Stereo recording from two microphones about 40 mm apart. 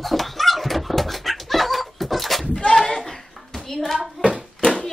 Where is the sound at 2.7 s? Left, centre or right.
Centre.